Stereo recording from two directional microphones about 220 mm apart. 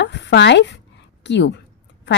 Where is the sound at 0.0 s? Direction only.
50° left (ahead or behind).